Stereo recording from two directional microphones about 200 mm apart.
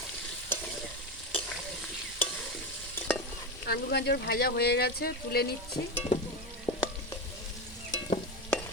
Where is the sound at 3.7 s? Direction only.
50° left (ahead or behind).